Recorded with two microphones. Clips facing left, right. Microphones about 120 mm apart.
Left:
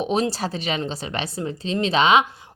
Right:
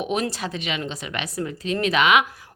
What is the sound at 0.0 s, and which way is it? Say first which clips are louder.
A woman's voice: left 3 dB; 30° left (ahead or behind).